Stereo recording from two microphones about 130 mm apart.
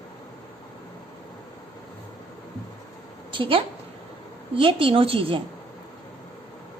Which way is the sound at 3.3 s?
45° right (ahead or behind).